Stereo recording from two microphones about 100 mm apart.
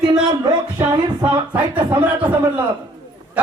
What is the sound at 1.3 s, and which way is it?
A man's voice, 15° right (ahead or behind).